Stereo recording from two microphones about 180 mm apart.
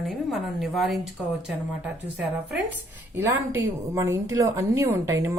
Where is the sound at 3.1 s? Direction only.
15° right (ahead or behind).